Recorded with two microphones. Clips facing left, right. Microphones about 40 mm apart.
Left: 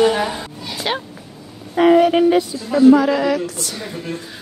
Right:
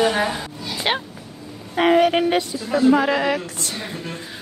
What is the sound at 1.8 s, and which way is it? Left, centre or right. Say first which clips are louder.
Speech: left 4 dB; right.